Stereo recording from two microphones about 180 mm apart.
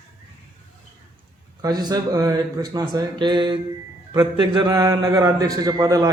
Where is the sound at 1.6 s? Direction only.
20° right (ahead or behind).